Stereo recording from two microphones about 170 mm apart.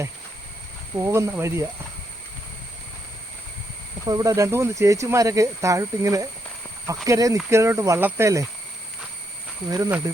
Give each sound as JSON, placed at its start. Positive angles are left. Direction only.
{"t": 0.9, "sound": "speech", "side_deg": -15}
{"t": 4.0, "sound": "speech", "side_deg": -20}
{"t": 9.6, "sound": "speech", "side_deg": -20}